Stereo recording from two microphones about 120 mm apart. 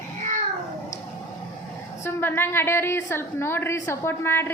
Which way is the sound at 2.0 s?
20° left (ahead or behind).